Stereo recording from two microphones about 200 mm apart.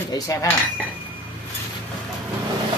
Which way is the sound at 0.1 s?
15° left (ahead or behind).